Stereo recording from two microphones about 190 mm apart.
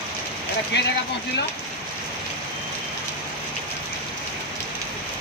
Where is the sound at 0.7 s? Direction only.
65° left (ahead or behind).